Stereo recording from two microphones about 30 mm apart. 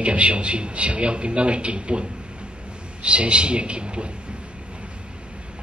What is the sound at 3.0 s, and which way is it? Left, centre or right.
A man's voice, right.